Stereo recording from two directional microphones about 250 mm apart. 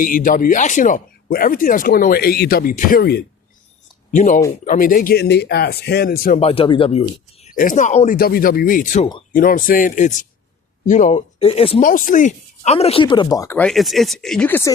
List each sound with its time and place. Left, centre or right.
0.0 s speech: left; by 14.7 s centre